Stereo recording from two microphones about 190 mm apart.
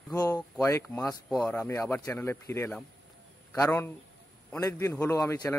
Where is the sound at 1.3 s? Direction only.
Centre (ahead or behind).